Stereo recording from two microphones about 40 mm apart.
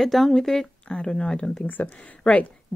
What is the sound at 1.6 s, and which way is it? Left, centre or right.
Speech, left.